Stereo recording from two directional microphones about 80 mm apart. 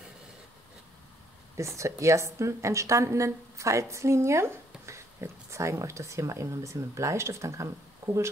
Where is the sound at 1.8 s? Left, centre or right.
Right.